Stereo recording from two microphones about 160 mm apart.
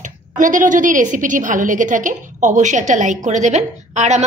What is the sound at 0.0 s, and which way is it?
A woman's voice, 55° right (ahead or behind).